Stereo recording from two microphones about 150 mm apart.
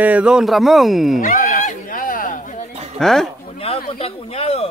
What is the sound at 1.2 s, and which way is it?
Neigh, 70° left (ahead or behind).